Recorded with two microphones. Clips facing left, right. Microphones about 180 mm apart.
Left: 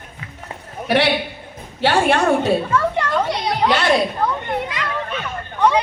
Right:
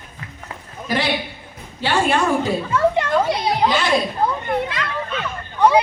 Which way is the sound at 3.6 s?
70° left (ahead or behind).